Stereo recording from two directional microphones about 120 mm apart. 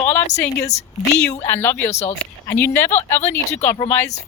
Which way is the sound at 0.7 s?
70° left (ahead or behind).